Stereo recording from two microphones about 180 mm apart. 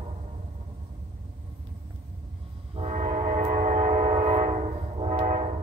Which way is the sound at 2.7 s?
35° right (ahead or behind).